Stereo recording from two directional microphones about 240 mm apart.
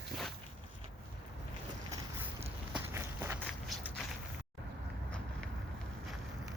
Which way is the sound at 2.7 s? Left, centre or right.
Centre.